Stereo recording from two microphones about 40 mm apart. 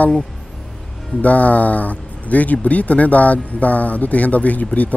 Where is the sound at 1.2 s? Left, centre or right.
Left.